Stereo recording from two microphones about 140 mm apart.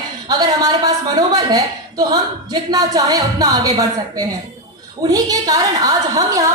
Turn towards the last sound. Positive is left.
turn(degrees=-25)  # may be behind; listen again after turning